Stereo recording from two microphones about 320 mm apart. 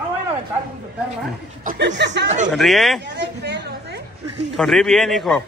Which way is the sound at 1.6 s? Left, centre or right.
Right.